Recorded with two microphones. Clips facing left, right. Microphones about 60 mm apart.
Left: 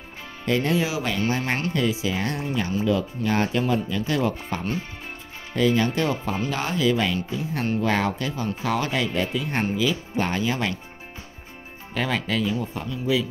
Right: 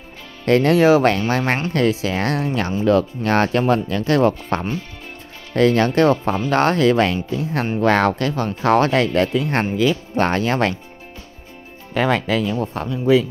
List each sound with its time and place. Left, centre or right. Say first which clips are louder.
0.5 s speech: right 10 dB; right
11.9 s speech: right 7 dB; right